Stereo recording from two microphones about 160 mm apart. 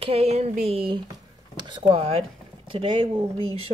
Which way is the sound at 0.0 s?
40° right (ahead or behind).